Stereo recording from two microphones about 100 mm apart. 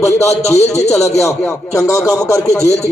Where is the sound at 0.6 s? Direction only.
90° left.